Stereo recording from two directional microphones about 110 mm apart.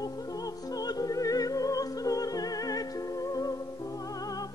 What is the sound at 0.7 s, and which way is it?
Music, 35° left (ahead or behind).